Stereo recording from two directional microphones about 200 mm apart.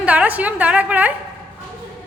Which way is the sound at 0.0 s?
5° right (ahead or behind).